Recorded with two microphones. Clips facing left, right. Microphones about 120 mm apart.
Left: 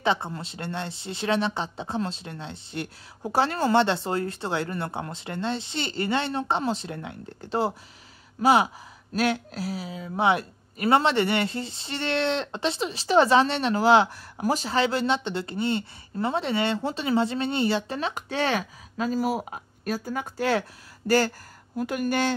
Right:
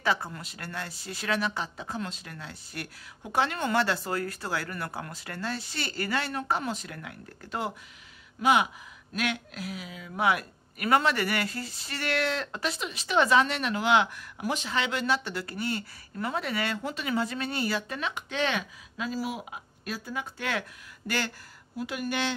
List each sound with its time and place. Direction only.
0.0 s a woman's voice: 25° left (ahead or behind); by 22.3 s 45° left (ahead or behind)